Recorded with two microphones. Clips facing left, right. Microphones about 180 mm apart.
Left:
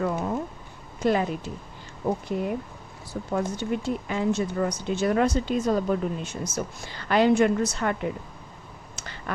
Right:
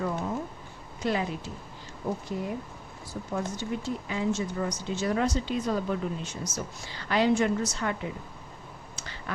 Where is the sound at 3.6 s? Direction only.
60° left (ahead or behind).